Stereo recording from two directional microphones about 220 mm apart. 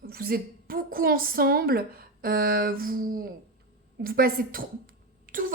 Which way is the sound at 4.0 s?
40° right (ahead or behind).